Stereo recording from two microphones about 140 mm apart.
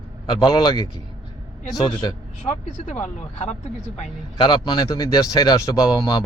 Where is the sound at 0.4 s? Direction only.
30° left (ahead or behind).